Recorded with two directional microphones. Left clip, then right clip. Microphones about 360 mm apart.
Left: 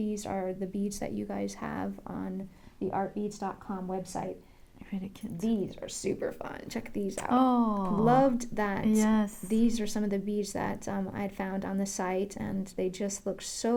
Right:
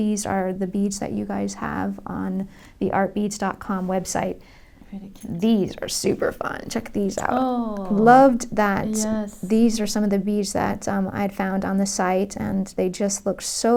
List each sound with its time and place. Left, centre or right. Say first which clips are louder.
0.0 s a woman's voice: right 10 dB; centre
2.8 s speech: right 10 dB; right
5.4 s speech: right 11 dB; right
7.4 s speech: right 2 dB; left
7.9 s a woman's voice: right 12 dB; centre
9.0 s speech: right 3 dB; left
9.5 s a woman's voice: right 11 dB; centre